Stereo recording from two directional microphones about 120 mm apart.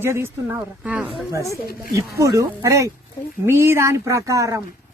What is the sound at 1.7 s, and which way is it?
Speech, 25° right (ahead or behind).